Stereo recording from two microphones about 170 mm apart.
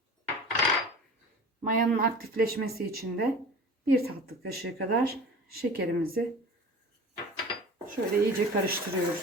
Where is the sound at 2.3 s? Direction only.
60° right (ahead or behind).